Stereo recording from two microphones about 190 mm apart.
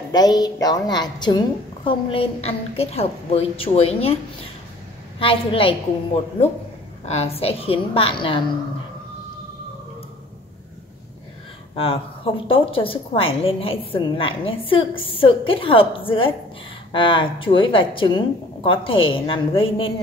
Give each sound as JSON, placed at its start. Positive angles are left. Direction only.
{"t": 0.1, "sound": "a woman's voice", "side_deg": 20}
{"t": 5.2, "sound": "a woman's voice", "side_deg": 30}
{"t": 7.1, "sound": "a woman's voice", "side_deg": 30}
{"t": 11.7, "sound": "a woman's voice", "side_deg": 30}